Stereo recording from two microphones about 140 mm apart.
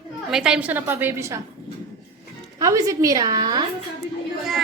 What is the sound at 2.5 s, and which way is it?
A woman's voice, 25° right (ahead or behind).